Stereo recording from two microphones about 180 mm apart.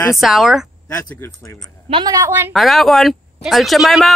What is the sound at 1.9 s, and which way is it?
Speech, 25° right (ahead or behind).